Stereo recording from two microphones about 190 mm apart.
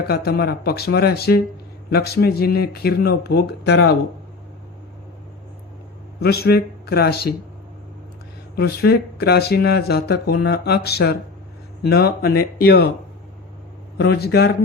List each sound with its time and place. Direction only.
0.1 s speech: 55° left (ahead or behind)
6.1 s a man's voice: 55° left (ahead or behind)
8.5 s speech: 55° left (ahead or behind)
14.0 s speech: 60° left (ahead or behind)